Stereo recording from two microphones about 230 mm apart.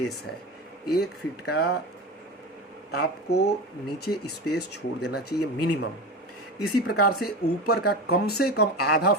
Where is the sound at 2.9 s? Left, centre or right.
Left.